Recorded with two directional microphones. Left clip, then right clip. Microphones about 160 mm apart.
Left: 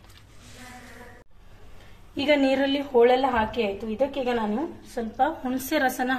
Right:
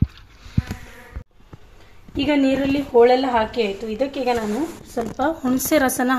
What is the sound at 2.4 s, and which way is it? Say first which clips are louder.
Speech: right 3 dB; 70° right (ahead or behind).